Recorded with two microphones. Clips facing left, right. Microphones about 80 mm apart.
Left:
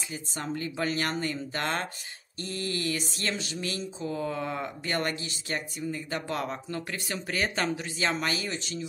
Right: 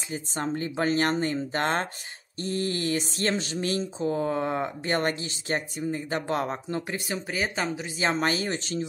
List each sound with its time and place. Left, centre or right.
0.1 s speech: right
7.1 s speech: centre
8.0 s speech: right